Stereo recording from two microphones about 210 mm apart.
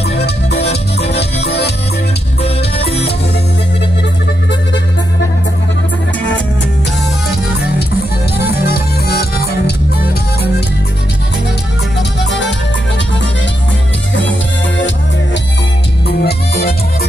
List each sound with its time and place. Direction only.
0.6 s music: 30° left (ahead or behind)
2.4 s music: 30° left (ahead or behind)
8.4 s music: 50° left (ahead or behind)
12.2 s music: 55° left (ahead or behind)
16.1 s music: 50° left (ahead or behind)